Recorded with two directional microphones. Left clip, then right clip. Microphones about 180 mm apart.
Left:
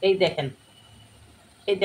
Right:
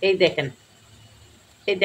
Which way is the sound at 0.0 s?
35° right (ahead or behind).